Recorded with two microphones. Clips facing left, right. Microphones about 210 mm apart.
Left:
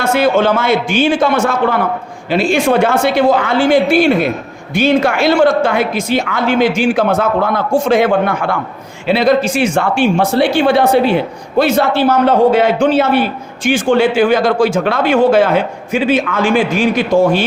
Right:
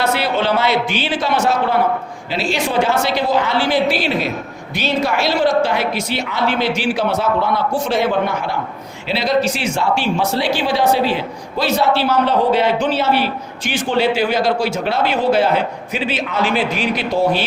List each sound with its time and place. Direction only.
0.0 s speech: 50° left (ahead or behind)